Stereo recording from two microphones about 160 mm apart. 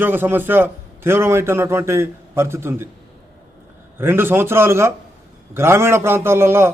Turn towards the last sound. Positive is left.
turn(degrees=-15)  # may be behind; listen again after turning